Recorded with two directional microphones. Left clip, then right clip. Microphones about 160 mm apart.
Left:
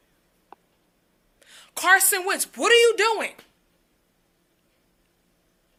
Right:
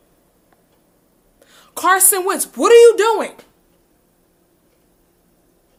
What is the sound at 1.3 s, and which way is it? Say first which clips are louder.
A woman's voice: right 4 dB; 20° right (ahead or behind).